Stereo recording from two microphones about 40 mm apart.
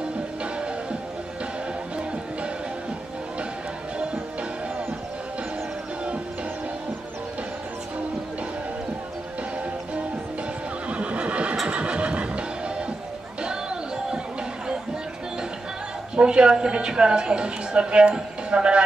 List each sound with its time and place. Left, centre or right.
10.9 s neigh: right
11.6 s music: right
16.2 s a woman's voice: right